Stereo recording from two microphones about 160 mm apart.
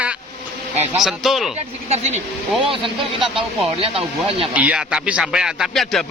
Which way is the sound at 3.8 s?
35° right (ahead or behind).